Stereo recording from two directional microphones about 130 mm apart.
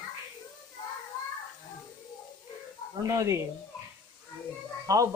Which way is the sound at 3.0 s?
25° right (ahead or behind).